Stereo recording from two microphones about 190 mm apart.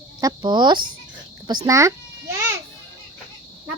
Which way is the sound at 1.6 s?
15° right (ahead or behind).